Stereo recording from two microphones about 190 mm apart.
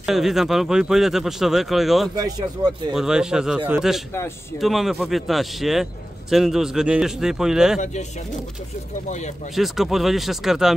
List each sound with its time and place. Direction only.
0.0 s speech: centre (ahead or behind)
2.1 s speech: 20° right (ahead or behind)
2.9 s speech: 5° right (ahead or behind)
9.6 s speech: centre (ahead or behind)